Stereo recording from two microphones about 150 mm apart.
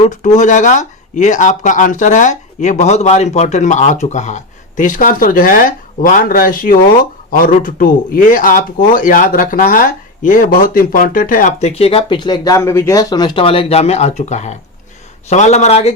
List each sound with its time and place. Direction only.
0.3 s a man's voice: 55° left (ahead or behind)